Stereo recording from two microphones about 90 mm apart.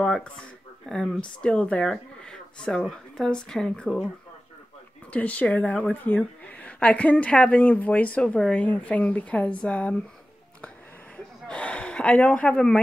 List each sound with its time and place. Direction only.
0.0 s a sound: 10° left (ahead or behind)
0.8 s a woman's voice: 5° left (ahead or behind)
5.1 s a woman's voice: 15° left (ahead or behind)
11.4 s gasp: 10° left (ahead or behind)